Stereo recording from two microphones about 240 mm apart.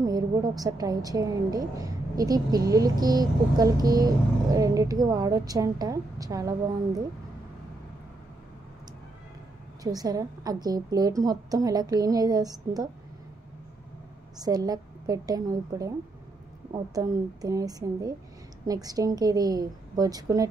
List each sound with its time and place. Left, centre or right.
0.0 s a woman's voice: centre
9.8 s a woman's voice: centre
14.4 s a woman's voice: centre
16.9 s a woman's voice: centre